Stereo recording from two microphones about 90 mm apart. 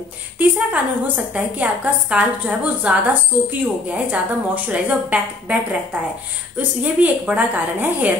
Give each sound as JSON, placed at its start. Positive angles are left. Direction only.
{"t": 0.4, "sound": "a woman's voice", "side_deg": -15}
{"t": 6.8, "sound": "a woman's voice", "side_deg": -15}